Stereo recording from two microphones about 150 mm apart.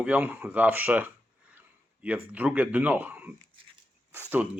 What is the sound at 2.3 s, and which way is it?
Speech, 10° right (ahead or behind).